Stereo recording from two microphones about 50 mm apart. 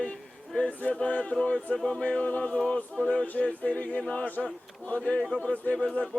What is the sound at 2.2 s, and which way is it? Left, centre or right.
Male singing, left.